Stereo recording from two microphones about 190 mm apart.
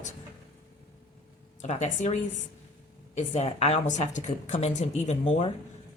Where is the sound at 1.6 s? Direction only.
35° left (ahead or behind).